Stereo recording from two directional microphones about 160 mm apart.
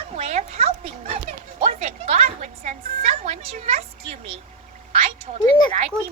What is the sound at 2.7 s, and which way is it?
Music, 40° right (ahead or behind).